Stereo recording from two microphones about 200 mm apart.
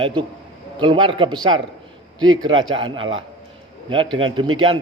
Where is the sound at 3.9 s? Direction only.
25° right (ahead or behind).